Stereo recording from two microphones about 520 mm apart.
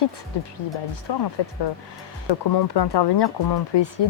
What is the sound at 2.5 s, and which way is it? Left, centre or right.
Speech, left.